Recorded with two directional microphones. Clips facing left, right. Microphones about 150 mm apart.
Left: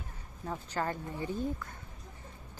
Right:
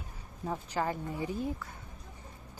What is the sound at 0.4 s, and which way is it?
A woman's voice, 10° right (ahead or behind).